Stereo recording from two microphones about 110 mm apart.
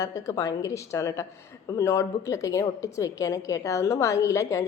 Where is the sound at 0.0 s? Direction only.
30° left (ahead or behind).